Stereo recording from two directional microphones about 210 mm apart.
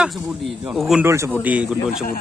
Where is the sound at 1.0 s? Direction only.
15° right (ahead or behind).